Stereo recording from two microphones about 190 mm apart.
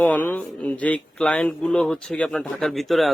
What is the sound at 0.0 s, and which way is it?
A man's voice, 10° left (ahead or behind).